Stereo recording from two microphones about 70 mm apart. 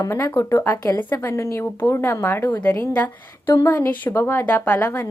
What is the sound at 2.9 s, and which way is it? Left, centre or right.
Speech, left.